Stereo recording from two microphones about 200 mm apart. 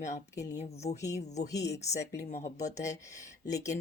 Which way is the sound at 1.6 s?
60° left (ahead or behind).